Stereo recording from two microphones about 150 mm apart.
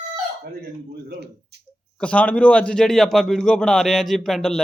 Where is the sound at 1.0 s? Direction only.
90° right.